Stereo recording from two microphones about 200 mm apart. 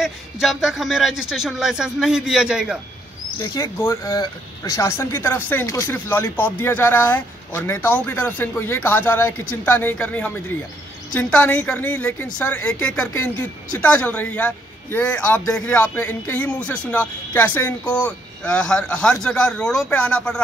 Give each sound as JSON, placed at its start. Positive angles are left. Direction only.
{"t": 0.0, "sound": "speech", "side_deg": 0}
{"t": 3.3, "sound": "speech", "side_deg": 15}